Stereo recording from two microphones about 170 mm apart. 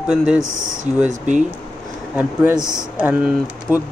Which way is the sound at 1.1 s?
45° right (ahead or behind).